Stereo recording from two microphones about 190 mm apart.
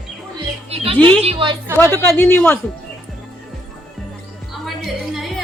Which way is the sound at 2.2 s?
10° left (ahead or behind).